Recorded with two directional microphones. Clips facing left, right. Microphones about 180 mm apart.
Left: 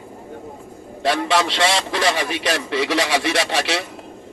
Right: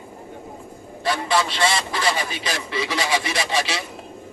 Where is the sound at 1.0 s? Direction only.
75° left (ahead or behind).